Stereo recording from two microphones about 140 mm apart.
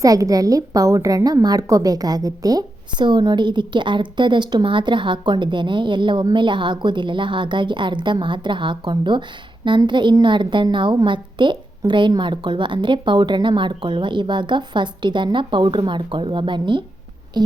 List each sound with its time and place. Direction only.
0.0 s a woman's voice: 25° right (ahead or behind)